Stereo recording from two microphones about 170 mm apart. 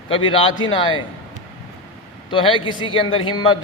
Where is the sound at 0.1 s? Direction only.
30° left (ahead or behind).